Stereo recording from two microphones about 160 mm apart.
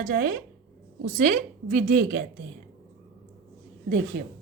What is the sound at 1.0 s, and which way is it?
Speech, 55° right (ahead or behind).